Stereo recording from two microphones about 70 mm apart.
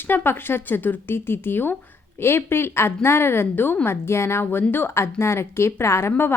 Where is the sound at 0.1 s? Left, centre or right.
Left.